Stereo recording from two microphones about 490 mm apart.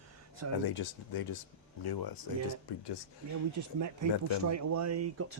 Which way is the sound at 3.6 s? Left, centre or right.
Right.